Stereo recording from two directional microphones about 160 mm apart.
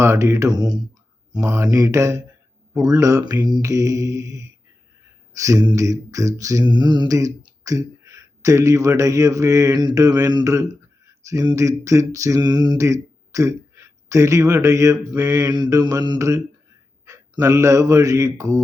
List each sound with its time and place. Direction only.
0.0 s mantra: 15° right (ahead or behind)
17.1 s speech: 20° right (ahead or behind)